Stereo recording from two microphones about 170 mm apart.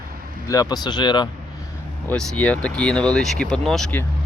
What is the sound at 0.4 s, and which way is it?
Speech, 20° left (ahead or behind).